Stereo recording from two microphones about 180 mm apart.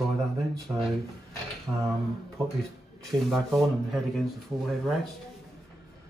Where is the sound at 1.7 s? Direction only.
5° right (ahead or behind).